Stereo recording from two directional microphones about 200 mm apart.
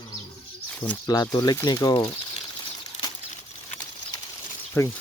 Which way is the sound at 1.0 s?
20° left (ahead or behind).